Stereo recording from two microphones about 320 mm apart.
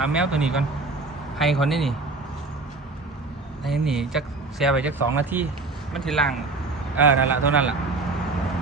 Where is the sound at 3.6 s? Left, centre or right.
Centre.